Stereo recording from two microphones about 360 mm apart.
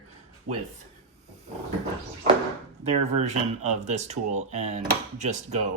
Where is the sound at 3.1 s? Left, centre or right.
Centre.